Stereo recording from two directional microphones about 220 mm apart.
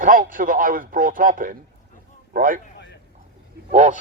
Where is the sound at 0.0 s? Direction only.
40° right (ahead or behind).